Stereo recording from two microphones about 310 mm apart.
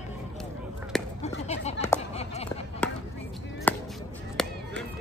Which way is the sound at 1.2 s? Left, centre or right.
Left.